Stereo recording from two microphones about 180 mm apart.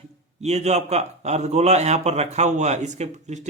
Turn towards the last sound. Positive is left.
turn(degrees=-40)  # may be behind; listen again after turning